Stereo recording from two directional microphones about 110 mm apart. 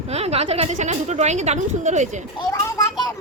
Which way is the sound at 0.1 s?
70° right (ahead or behind).